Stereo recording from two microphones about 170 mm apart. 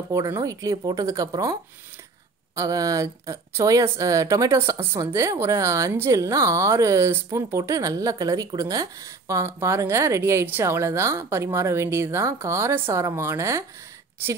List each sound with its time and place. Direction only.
0.1 s a woman's voice: 20° right (ahead or behind)